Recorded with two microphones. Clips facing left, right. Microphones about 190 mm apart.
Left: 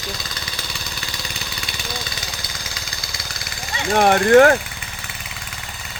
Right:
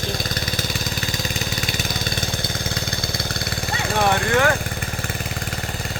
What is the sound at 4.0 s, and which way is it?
Speech, 55° left (ahead or behind).